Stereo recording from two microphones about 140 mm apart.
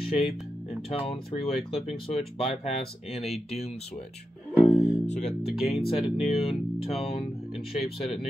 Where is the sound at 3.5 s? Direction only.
50° left (ahead or behind).